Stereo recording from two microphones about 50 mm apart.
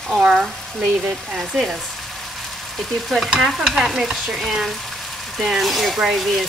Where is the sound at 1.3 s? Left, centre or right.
Centre.